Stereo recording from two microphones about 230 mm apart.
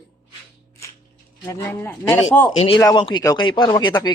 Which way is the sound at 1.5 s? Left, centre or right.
Centre.